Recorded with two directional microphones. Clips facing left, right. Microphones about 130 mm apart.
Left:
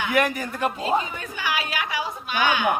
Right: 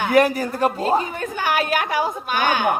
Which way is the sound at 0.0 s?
40° right (ahead or behind).